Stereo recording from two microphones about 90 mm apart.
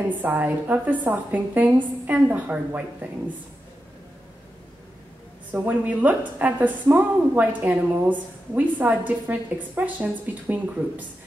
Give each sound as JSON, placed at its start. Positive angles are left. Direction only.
{"t": 0.2, "sound": "a woman's voice", "side_deg": -20}
{"t": 5.5, "sound": "a woman's voice", "side_deg": -20}